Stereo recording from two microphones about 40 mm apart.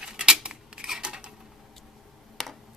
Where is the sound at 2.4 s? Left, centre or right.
Centre.